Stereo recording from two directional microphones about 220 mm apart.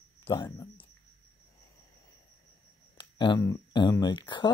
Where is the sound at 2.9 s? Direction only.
20° left (ahead or behind).